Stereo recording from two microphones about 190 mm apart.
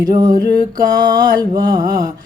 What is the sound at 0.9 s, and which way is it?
Music, 20° right (ahead or behind).